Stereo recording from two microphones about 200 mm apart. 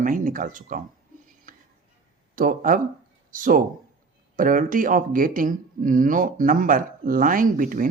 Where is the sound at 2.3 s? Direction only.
40° right (ahead or behind).